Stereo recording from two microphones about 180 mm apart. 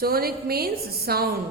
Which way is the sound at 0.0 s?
55° right (ahead or behind).